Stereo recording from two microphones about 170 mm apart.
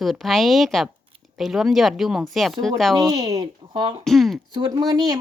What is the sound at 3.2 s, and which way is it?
Speech, 25° right (ahead or behind).